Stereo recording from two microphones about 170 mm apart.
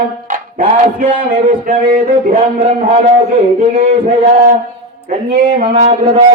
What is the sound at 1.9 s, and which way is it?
Speech, 35° right (ahead or behind).